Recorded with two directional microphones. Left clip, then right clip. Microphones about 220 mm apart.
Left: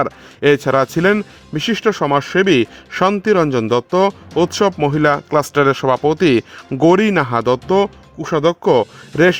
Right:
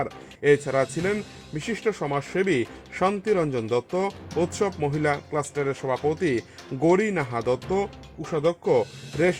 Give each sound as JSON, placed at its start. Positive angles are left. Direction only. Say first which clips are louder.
{"t": 0.0, "sound": "speech", "louder": "left 9 dB", "side_deg": 50}